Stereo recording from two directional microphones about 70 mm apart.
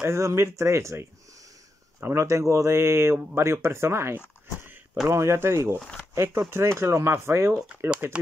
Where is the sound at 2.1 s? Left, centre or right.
Right.